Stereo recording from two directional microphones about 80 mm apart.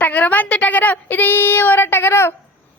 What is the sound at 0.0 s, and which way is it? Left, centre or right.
A woman's voice, centre.